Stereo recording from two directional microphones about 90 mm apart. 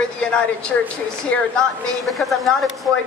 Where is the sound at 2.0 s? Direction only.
Centre (ahead or behind).